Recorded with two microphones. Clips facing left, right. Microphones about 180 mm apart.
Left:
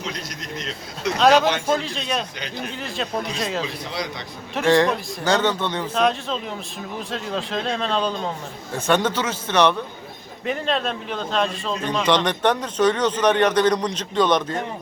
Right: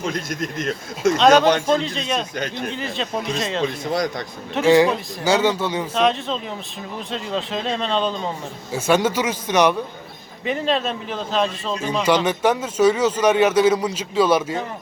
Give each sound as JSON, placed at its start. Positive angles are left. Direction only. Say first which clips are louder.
{"t": 0.6, "sound": "speech", "louder": "right 7 dB", "side_deg": -50}
{"t": 1.2, "sound": "a man's voice", "louder": "right 1 dB", "side_deg": 0}
{"t": 3.8, "sound": "speech", "louder": "right 7 dB", "side_deg": -45}
{"t": 4.5, "sound": "a man's voice", "louder": "right 3 dB", "side_deg": -5}